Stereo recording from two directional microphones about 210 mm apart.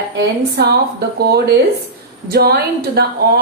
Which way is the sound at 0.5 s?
50° right (ahead or behind).